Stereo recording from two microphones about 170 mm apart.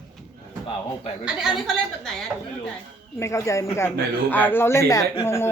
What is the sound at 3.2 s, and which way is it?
Speech, 15° left (ahead or behind).